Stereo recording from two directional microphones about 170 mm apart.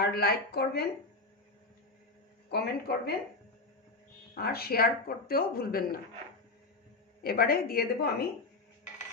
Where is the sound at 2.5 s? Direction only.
65° left (ahead or behind).